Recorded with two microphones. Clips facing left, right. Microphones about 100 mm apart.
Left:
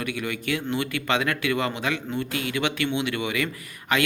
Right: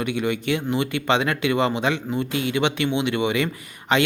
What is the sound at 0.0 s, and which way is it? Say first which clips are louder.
Speech: right 6 dB; 25° right (ahead or behind).